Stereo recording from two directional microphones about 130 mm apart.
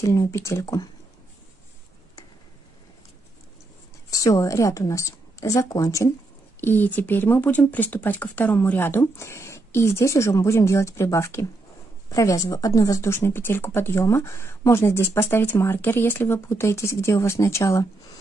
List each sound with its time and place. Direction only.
0.0 s speech: 25° left (ahead or behind)
4.1 s a woman's voice: 25° left (ahead or behind)